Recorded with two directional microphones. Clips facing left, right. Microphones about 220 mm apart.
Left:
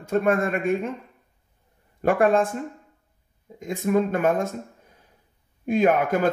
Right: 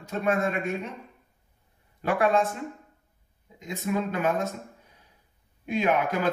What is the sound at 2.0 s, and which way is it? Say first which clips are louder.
Speech: left 4 dB; 50° left (ahead or behind).